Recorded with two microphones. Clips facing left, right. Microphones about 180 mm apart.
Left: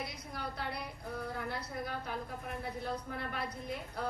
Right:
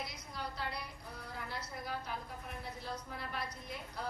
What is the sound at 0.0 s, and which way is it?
A woman's voice, 55° left (ahead or behind).